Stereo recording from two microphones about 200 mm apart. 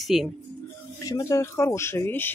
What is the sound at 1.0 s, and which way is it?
Speech, 15° left (ahead or behind).